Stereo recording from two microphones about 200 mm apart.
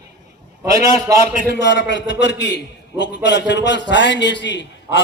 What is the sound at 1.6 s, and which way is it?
A man's voice, 60° left (ahead or behind).